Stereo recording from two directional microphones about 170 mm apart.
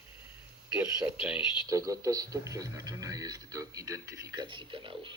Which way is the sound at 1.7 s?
20° right (ahead or behind).